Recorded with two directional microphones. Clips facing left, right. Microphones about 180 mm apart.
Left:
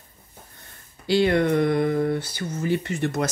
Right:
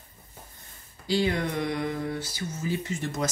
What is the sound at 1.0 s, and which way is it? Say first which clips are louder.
Speech: left 7 dB; 70° left (ahead or behind).